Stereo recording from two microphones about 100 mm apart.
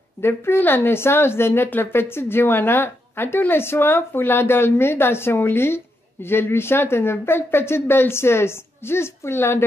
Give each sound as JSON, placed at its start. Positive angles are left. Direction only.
{"t": 0.2, "sound": "a woman's voice", "side_deg": 25}